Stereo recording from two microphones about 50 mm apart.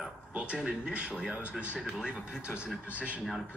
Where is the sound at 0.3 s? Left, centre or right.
Right.